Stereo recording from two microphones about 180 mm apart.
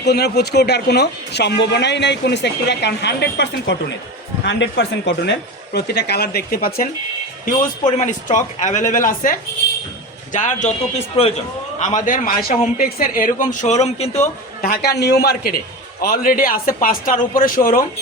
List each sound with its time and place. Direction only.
0.0 s a man's voice: 65° left (ahead or behind)
7.9 s a man's voice: 45° left (ahead or behind)
14.6 s a man's voice: 60° left (ahead or behind)